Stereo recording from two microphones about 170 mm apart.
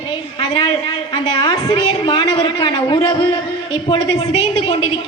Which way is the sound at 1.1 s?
25° left (ahead or behind).